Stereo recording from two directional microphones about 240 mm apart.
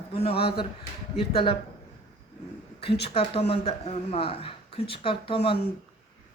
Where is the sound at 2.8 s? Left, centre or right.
Left.